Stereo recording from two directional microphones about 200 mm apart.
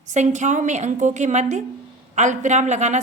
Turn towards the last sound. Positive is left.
turn(degrees=-35)  # may be behind; listen again after turning